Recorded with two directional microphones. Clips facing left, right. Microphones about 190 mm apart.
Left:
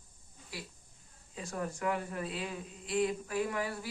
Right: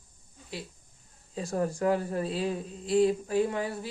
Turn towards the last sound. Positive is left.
turn(degrees=-25)  # may be behind; listen again after turning